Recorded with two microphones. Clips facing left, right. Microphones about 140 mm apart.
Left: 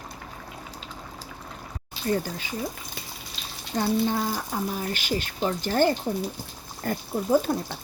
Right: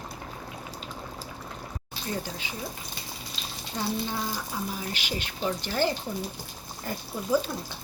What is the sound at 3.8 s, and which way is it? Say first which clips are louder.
Speech: left 6 dB; 50° left (ahead or behind).